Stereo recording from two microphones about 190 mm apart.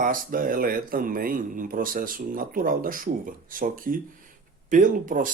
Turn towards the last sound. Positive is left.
turn(degrees=-45)  # may be behind; listen again after turning